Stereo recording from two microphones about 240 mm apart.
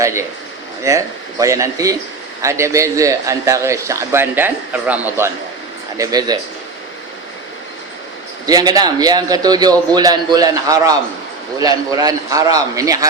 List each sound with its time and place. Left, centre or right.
0.0 s a man's voice: centre
8.4 s a man's voice: centre